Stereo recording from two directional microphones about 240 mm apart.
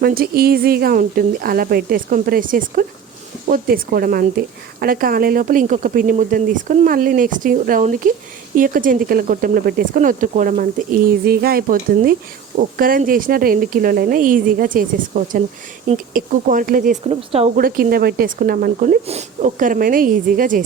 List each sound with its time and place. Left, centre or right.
0.0 s a woman's voice: right
17.6 s a woman's voice: right